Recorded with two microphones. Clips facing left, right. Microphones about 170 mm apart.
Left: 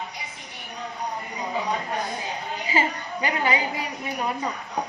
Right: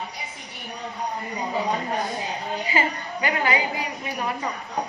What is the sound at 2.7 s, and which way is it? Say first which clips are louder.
Speech: left 2 dB; 25° left (ahead or behind).